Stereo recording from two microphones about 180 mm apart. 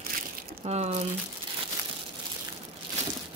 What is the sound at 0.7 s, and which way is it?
Speech, 35° right (ahead or behind).